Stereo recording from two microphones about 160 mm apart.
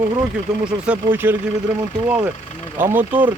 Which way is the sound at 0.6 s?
10° right (ahead or behind).